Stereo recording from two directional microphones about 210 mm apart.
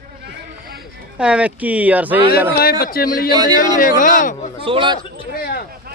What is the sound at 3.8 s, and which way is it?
Speech, 40° left (ahead or behind).